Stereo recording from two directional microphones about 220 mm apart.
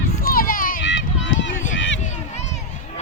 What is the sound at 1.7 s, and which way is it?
Run, 55° left (ahead or behind).